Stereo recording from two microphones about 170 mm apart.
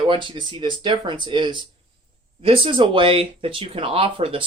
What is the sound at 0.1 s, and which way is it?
Speech, 30° right (ahead or behind).